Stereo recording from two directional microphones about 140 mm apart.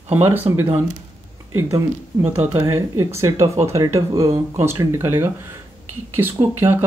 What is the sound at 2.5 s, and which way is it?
Speech, 20° right (ahead or behind).